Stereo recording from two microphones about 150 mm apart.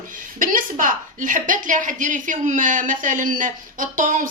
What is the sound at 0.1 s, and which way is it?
A woman's voice, 65° right (ahead or behind).